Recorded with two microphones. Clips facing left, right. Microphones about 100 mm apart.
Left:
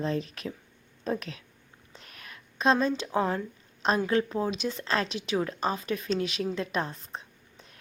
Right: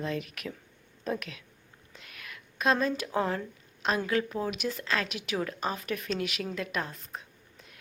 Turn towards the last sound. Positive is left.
turn(degrees=30)  # may be behind; listen again after turning